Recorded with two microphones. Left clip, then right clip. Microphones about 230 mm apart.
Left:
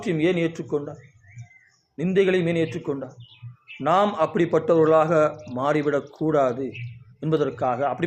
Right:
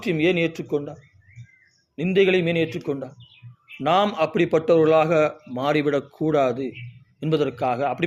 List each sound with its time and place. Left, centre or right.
0.0 s a man's voice: right
2.0 s a man's voice: right